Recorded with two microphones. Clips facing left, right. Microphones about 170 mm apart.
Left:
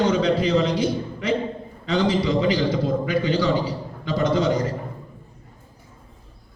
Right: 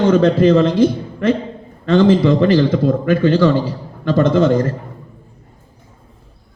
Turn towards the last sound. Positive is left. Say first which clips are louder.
# right 7 dB
turn(degrees=-50)  # may be behind; listen again after turning